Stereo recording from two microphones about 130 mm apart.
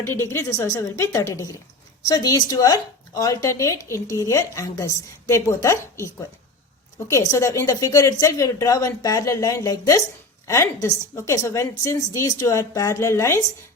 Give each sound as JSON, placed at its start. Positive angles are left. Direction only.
{"t": 0.0, "sound": "a woman's voice", "side_deg": 20}
{"t": 7.1, "sound": "a woman's voice", "side_deg": 25}